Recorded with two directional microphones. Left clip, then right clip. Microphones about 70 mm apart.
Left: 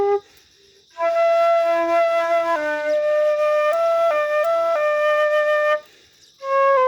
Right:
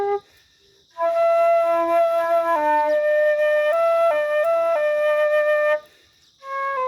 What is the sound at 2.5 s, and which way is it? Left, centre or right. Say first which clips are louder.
Flute: right 2 dB; centre.